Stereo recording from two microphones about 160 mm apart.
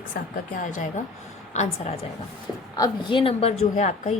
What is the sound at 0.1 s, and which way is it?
Speech, 70° left (ahead or behind).